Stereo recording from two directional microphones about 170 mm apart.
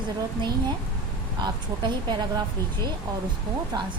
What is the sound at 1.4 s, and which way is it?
Speech, 25° right (ahead or behind).